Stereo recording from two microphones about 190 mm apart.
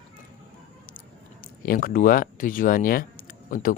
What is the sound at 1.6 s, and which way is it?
Speech, 50° left (ahead or behind).